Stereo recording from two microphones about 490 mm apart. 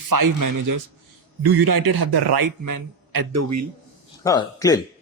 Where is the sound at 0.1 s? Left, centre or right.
Right.